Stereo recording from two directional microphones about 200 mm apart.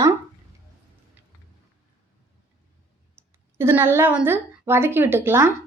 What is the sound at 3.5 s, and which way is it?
A woman's voice, 10° right (ahead or behind).